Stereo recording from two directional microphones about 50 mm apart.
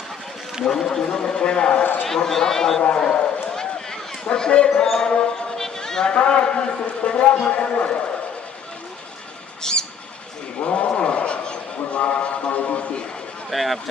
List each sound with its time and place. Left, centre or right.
0.6 s speech: centre
2.0 s speech: centre
3.1 s a sound: centre
4.8 s a man's voice: centre
9.7 s bird: centre
10.6 s a sound: left
13.5 s speech: centre